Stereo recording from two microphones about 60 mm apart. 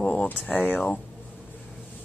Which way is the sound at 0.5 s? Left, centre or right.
Left.